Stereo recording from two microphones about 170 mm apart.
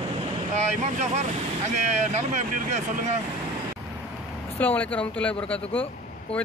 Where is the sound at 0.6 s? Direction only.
40° right (ahead or behind).